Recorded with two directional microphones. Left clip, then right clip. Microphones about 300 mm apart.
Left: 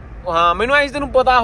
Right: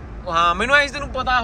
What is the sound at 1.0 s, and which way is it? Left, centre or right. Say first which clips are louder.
Speech: left 7 dB; centre.